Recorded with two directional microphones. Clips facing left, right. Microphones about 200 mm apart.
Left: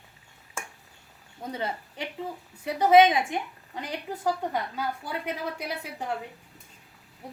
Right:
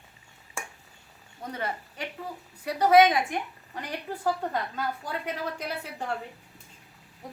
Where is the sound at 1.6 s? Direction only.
20° left (ahead or behind).